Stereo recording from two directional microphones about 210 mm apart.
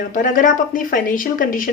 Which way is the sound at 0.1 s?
40° left (ahead or behind).